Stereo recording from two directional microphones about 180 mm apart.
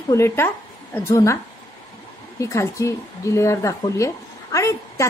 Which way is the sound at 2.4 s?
15° left (ahead or behind).